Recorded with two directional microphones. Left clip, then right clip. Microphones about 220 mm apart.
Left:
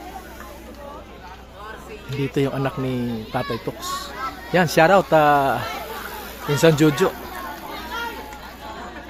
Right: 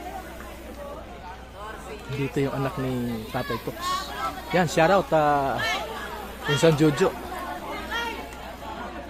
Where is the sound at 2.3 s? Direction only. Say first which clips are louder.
Left 4 dB; 15° left (ahead or behind).